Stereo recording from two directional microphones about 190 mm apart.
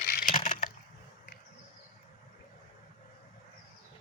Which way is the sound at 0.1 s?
50° left (ahead or behind).